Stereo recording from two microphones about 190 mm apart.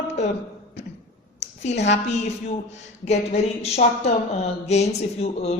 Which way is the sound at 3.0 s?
35° left (ahead or behind).